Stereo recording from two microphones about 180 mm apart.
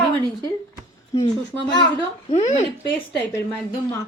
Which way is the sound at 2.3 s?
40° left (ahead or behind).